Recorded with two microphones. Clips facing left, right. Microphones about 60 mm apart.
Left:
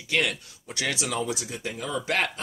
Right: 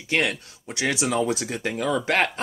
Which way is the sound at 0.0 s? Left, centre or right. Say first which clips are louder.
Right 2 dB; right.